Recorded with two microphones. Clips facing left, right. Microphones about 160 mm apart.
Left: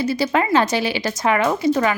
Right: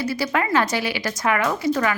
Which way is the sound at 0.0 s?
25° left (ahead or behind).